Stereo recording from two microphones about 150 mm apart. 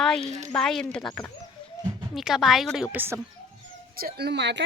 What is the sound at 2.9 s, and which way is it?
Speech, 15° right (ahead or behind).